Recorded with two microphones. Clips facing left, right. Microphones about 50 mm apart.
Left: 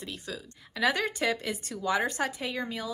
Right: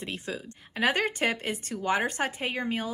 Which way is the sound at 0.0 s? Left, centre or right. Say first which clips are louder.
Right 4 dB; right.